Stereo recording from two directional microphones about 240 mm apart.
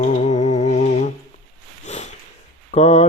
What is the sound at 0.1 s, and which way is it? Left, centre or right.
Music, left.